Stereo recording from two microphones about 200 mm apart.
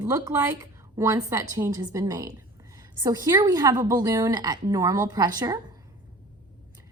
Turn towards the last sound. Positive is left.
turn(degrees=-20)  # may be behind; listen again after turning